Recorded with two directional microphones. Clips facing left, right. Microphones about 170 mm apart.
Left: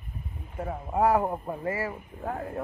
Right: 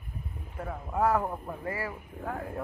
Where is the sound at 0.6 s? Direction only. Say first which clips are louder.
Left 3 dB; 20° left (ahead or behind).